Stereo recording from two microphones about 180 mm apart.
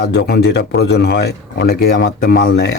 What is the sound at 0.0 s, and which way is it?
Speech, 65° left (ahead or behind).